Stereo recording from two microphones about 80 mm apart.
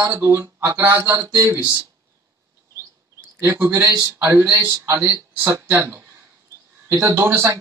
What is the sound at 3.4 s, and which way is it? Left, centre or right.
Speech, right.